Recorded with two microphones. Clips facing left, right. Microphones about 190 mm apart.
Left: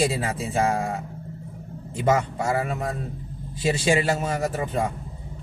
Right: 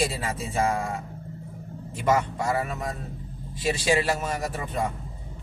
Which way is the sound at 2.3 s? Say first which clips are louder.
Left 2 dB; 30° left (ahead or behind).